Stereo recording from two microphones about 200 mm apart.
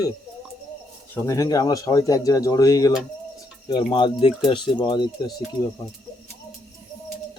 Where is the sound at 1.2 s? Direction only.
15° left (ahead or behind).